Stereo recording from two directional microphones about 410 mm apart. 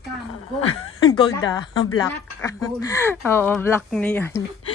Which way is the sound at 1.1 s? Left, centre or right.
Centre.